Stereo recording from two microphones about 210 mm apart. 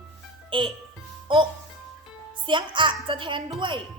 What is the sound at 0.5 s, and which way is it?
A woman's voice, 25° right (ahead or behind).